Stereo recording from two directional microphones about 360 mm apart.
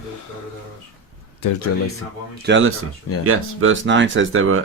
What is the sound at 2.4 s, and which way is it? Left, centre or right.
Speech, right.